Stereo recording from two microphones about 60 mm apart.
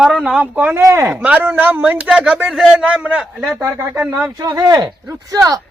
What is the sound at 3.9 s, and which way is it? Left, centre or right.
Speech, right.